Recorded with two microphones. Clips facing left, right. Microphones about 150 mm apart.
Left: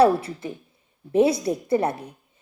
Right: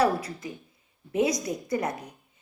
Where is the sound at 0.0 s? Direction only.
30° left (ahead or behind).